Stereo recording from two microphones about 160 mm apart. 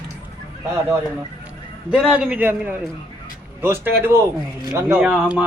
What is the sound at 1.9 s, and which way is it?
Speech, 5° right (ahead or behind).